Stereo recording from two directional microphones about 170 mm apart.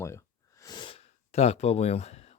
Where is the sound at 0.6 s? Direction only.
25° left (ahead or behind).